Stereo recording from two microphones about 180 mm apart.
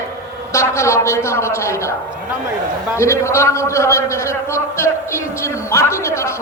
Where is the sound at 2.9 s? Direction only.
15° left (ahead or behind).